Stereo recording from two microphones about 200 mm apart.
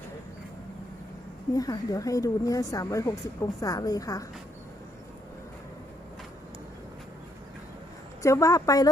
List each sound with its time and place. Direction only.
1.5 s a woman's voice: 20° left (ahead or behind)
8.2 s a woman's voice: 15° left (ahead or behind)